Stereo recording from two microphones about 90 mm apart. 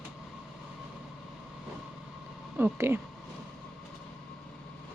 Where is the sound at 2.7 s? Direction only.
30° right (ahead or behind).